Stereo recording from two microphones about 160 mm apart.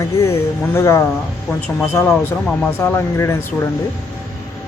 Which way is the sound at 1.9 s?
15° left (ahead or behind).